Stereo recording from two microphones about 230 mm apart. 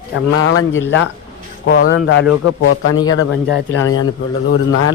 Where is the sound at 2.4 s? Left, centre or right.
Left.